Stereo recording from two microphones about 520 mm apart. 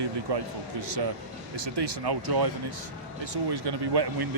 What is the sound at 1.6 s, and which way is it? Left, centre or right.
Speech, right.